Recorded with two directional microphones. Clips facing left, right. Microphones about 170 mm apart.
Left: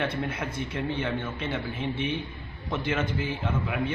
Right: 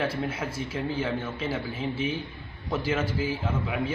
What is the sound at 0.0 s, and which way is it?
A man's voice, 5° right (ahead or behind).